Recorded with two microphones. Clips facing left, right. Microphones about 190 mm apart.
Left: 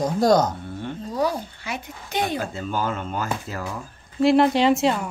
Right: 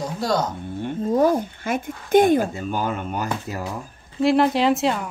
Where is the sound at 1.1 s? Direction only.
50° right (ahead or behind).